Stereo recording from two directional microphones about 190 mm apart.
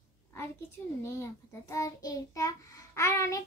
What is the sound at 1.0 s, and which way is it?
Child singing, 15° left (ahead or behind).